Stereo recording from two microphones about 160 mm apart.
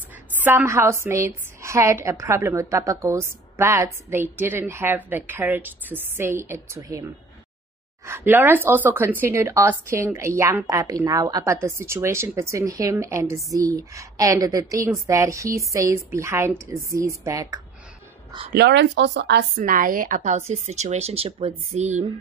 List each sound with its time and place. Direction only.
0.4 s a woman's voice: 15° right (ahead or behind)
18.5 s a woman's voice: 90° right; by 22.0 s 45° right (ahead or behind)